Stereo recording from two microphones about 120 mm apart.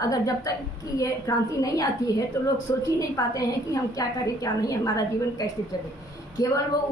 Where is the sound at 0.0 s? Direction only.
30° left (ahead or behind).